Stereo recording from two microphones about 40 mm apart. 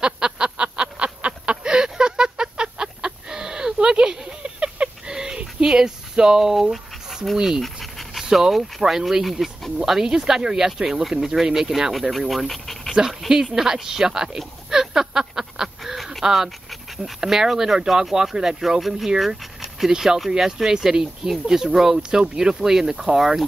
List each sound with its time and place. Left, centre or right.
0.0 s a sound: right
1.6 s a sound: centre
7.3 s speech: centre
7.6 s dog: centre
8.2 s speech: centre
9.8 s speech: centre
11.4 s speech: centre
11.9 s speech: centre
13.3 s speech: centre
15.8 s duck: centre
16.9 s speech: centre